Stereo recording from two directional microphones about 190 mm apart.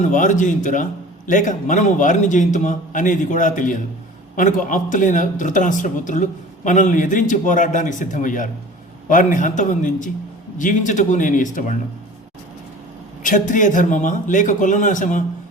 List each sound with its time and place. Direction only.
0.1 s a man's voice: 40° left (ahead or behind)
13.2 s a man's voice: 40° left (ahead or behind)